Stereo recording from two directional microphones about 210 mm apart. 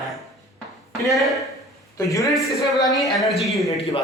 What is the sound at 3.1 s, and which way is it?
Speech, centre (ahead or behind).